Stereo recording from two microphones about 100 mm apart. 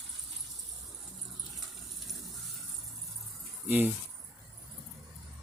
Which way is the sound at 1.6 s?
Centre (ahead or behind).